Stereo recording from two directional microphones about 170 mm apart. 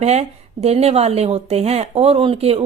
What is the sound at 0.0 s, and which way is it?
Speech, 40° right (ahead or behind).